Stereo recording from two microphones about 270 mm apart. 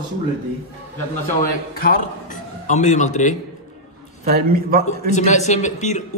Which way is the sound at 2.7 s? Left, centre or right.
Left.